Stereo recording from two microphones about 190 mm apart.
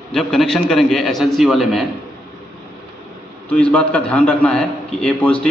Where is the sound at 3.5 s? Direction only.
5° left (ahead or behind).